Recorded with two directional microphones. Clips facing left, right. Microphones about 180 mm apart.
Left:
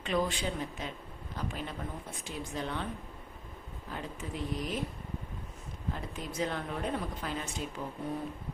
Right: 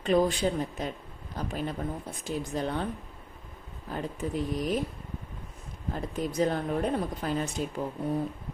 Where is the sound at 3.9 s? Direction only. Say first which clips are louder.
Right 8 dB; 40° right (ahead or behind).